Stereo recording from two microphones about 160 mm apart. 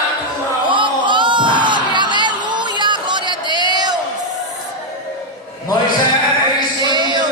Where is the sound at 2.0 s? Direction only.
30° right (ahead or behind).